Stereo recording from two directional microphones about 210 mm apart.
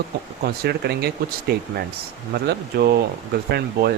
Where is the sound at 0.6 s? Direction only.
50° right (ahead or behind).